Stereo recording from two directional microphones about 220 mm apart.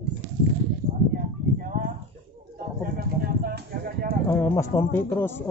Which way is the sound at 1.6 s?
40° right (ahead or behind).